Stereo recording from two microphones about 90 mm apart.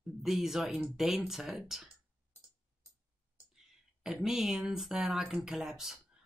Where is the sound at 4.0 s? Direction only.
5° right (ahead or behind).